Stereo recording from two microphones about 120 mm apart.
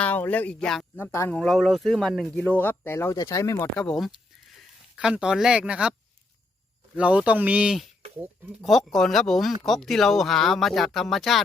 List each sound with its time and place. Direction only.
0.0 s speech: 15° left (ahead or behind)
0.9 s speech: 20° left (ahead or behind)
1.3 s speech: 5° left (ahead or behind); by 3.7 s 25° left (ahead or behind)
3.8 s speech: 5° left (ahead or behind)
4.9 s speech: 5° right (ahead or behind)
6.9 s speech: 10° right (ahead or behind)